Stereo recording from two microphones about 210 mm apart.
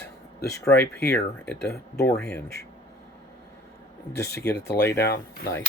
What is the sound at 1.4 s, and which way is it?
Speech, 5° left (ahead or behind).